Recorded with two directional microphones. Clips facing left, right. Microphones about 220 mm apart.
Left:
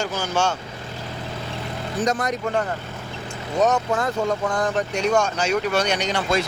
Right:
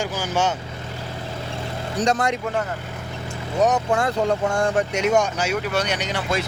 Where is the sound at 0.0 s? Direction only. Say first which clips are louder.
Even; 15° right (ahead or behind).